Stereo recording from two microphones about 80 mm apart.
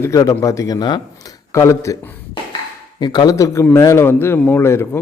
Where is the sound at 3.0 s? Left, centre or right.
Left.